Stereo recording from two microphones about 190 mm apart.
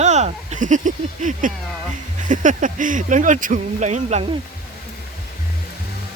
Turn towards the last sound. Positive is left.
turn(degrees=-35)  # may be behind; listen again after turning